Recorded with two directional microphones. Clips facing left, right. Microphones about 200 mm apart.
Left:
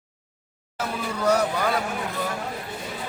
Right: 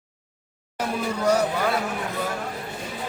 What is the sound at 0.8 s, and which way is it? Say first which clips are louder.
Speech: right 2 dB; 10° right (ahead or behind).